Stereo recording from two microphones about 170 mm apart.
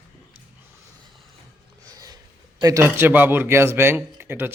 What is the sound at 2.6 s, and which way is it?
Speech, 20° right (ahead or behind).